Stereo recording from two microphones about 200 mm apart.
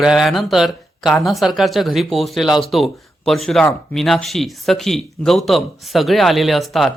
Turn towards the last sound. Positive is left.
turn(degrees=0)  # may be behind; listen again after turning